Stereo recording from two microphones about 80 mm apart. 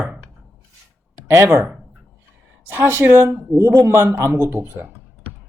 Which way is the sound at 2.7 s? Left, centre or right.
Right.